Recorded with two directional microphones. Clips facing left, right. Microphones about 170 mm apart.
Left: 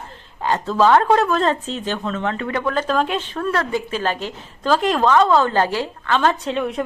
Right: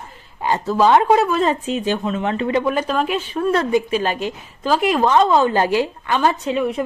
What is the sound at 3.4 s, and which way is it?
A woman's voice, 20° right (ahead or behind).